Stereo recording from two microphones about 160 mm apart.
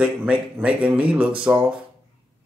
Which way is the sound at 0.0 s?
5° right (ahead or behind).